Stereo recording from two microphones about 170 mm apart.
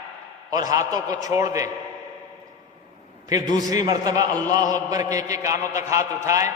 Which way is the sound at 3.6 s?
20° right (ahead or behind).